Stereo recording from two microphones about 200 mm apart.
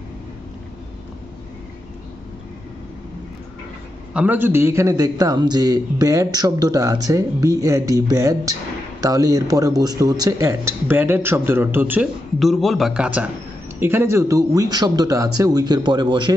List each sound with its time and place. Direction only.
4.1 s a man's voice: 5° right (ahead or behind); by 16.3 s 20° right (ahead or behind)